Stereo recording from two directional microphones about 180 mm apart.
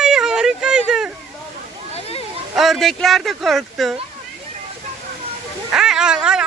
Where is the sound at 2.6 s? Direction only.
Centre (ahead or behind).